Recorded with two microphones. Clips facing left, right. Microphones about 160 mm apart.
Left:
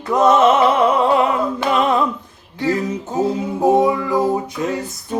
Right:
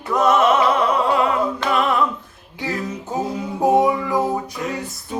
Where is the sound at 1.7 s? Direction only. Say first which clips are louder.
Left 3 dB; 20° left (ahead or behind).